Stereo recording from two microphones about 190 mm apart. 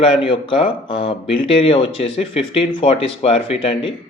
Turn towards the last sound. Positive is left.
turn(degrees=30)  # may be behind; listen again after turning